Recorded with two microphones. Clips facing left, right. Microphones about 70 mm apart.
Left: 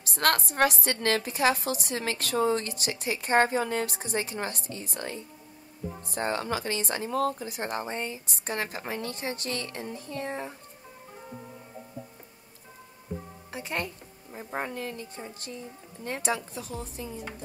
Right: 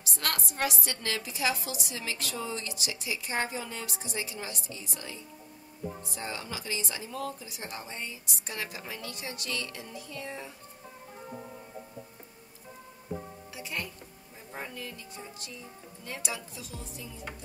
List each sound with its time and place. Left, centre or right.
0.0 s a woman's voice: left
13.5 s speech: left